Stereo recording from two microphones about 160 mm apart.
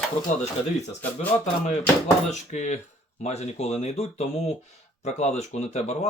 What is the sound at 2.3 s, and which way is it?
Speech, 45° left (ahead or behind).